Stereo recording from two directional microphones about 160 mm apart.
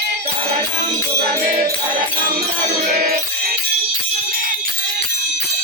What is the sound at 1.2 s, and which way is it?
Music, 65° right (ahead or behind).